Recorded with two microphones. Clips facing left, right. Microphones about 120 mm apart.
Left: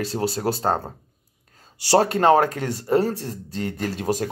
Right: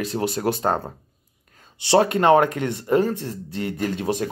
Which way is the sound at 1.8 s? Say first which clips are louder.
Even; 40° left (ahead or behind).